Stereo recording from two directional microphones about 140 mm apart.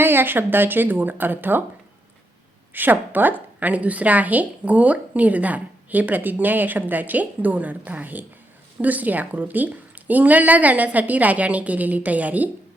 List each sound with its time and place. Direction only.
0.0 s a woman's voice: 15° right (ahead or behind)
2.7 s a woman's voice: 15° right (ahead or behind)